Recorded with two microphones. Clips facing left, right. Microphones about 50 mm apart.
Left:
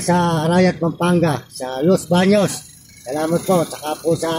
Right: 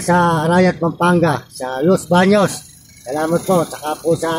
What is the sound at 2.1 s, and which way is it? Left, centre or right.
Speech, right.